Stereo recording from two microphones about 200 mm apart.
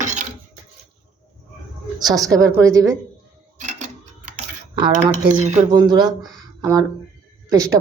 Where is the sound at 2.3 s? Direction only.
15° right (ahead or behind).